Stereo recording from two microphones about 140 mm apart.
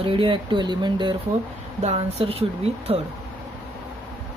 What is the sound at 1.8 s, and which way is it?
Speech, 50° right (ahead or behind).